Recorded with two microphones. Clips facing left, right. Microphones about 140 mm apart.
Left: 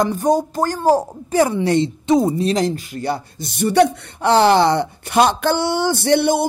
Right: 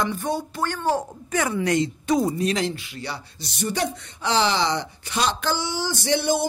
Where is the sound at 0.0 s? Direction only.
40° left (ahead or behind).